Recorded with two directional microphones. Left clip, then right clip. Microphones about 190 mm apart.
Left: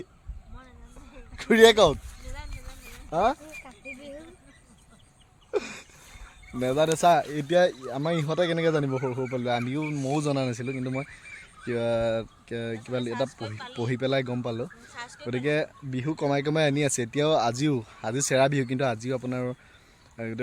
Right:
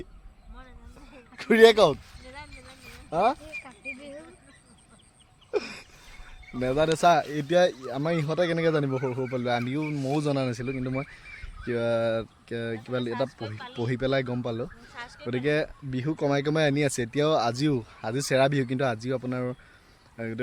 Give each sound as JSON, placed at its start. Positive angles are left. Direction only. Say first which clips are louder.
{"t": 1.4, "sound": "speech", "louder": "even", "side_deg": 15}
{"t": 3.1, "sound": "speech", "louder": "even", "side_deg": 15}
{"t": 5.5, "sound": "a sound", "louder": "even", "side_deg": 15}
{"t": 6.6, "sound": "a man's voice", "louder": "even", "side_deg": 5}
{"t": 14.9, "sound": "speech", "louder": "left 1 dB", "side_deg": 20}
{"t": 15.3, "sound": "a man's voice", "louder": "even", "side_deg": 0}